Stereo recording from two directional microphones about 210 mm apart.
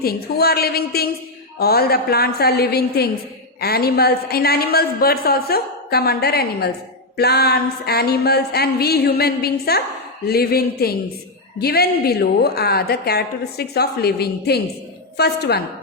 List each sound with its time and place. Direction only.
0.0 s a woman's voice: 45° left (ahead or behind)